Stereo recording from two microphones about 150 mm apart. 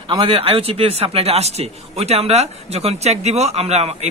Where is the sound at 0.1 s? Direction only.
35° right (ahead or behind).